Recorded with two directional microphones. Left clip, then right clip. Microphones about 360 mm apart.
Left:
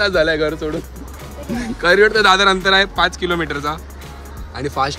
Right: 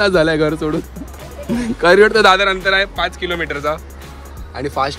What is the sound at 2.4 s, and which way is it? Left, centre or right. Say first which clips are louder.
Speech: left 1 dB; centre.